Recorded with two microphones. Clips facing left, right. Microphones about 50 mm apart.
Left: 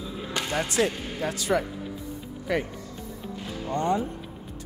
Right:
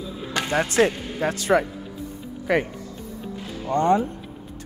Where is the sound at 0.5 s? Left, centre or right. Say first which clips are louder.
Right 6 dB; right.